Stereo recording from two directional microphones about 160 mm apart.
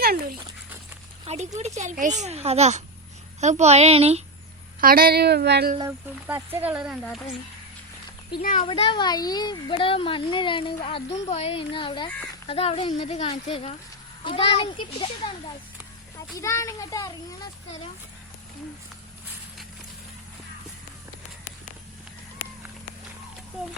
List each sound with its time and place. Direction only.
0.0 s speech: 65° right (ahead or behind)
1.2 s speech: 40° right (ahead or behind)
4.8 s a woman's voice: 65° right (ahead or behind); by 5.7 s 90° right
6.2 s speech: 10° right (ahead or behind)
8.4 s a child's voice: 60° left (ahead or behind)
8.6 s speech: 35° left (ahead or behind)
16.1 s a child's voice: 20° left (ahead or behind)